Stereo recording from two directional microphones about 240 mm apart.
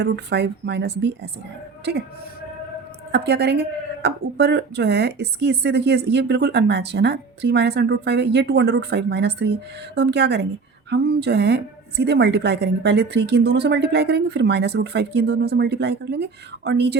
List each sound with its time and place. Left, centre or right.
0.0 s a woman's voice: right
3.1 s a woman's voice: right